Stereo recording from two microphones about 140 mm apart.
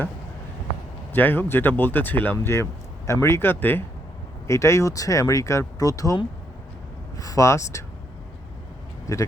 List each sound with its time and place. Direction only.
1.1 s speech: 15° left (ahead or behind)
7.2 s speech: 25° left (ahead or behind)
9.1 s speech: 20° left (ahead or behind)